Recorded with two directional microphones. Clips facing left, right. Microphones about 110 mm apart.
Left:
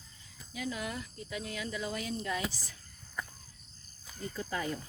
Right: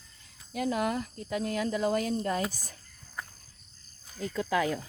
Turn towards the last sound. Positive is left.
turn(degrees=-90)